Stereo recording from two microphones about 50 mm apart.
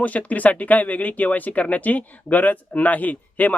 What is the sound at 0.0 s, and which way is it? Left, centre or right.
Speech, left.